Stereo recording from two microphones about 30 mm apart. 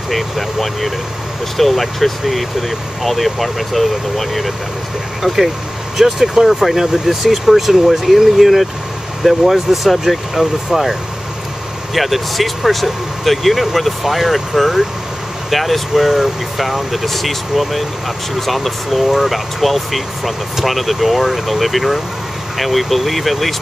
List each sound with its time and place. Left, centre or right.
0.1 s speech: centre
6.4 s speech: centre